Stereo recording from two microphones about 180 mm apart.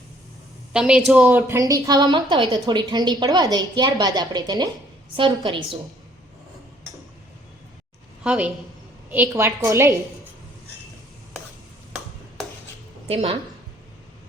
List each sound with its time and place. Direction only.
0.7 s a woman's voice: 5° right (ahead or behind); by 5.5 s 25° right (ahead or behind)
8.2 s a woman's voice: 5° right (ahead or behind)